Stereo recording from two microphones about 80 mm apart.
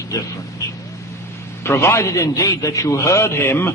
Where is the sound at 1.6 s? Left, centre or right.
Left.